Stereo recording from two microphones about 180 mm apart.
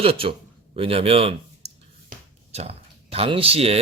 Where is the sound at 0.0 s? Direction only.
30° right (ahead or behind).